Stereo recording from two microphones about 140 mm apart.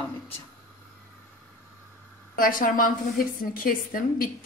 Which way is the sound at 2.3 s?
80° left.